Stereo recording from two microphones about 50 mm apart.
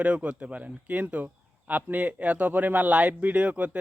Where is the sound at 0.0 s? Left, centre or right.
Right.